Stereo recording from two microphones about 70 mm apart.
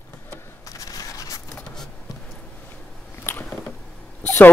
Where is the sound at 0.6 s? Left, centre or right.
Left.